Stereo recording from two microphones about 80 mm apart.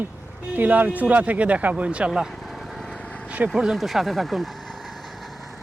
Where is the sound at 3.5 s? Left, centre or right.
Centre.